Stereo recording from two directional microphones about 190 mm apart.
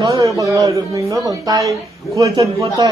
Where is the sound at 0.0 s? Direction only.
20° right (ahead or behind).